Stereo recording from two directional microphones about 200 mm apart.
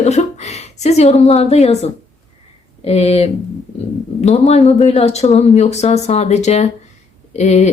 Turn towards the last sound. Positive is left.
turn(degrees=35)  # may be behind; listen again after turning